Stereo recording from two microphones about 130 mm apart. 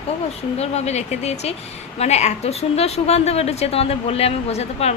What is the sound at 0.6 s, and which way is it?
A woman's voice, 55° left (ahead or behind).